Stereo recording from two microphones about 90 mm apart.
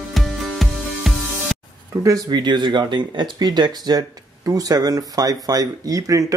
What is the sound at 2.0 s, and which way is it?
Speech, 55° right (ahead or behind).